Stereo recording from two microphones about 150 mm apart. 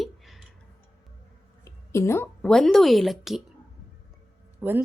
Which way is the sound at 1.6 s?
20° left (ahead or behind).